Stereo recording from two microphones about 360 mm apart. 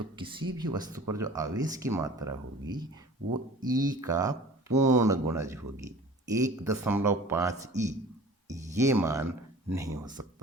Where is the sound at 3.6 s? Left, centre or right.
Centre.